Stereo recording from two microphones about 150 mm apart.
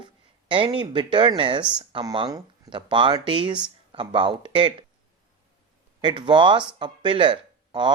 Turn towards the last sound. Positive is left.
turn(degrees=-30)  # may be behind; listen again after turning